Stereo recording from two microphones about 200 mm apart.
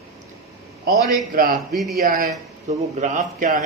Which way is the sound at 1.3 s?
45° right (ahead or behind).